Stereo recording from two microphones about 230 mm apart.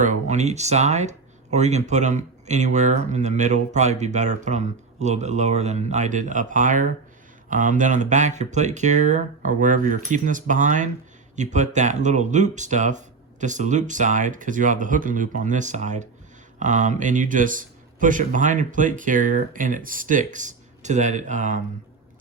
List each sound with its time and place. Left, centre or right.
0.0 s speech: right